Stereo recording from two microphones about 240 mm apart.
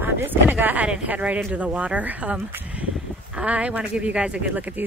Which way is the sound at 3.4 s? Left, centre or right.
Centre.